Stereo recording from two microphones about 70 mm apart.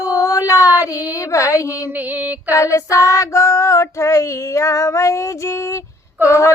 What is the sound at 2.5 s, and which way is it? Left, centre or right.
Child singing, left.